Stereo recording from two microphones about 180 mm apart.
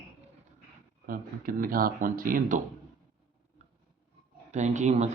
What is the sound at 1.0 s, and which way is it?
Speech, 50° right (ahead or behind).